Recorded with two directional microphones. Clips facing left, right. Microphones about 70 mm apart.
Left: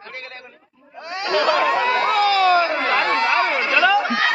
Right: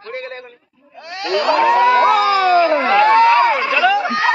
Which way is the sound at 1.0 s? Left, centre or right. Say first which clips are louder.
Right 1 dB; left.